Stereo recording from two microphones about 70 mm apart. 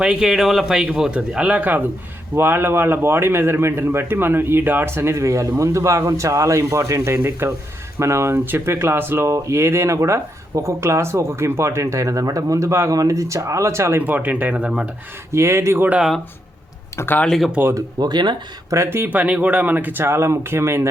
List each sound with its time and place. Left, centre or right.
0.0 s a man's voice: centre; by 14.0 s right
14.0 s speech: right
15.3 s a man's voice: right
17.2 s speech: centre
18.0 s speech: right
18.9 s a man's voice: right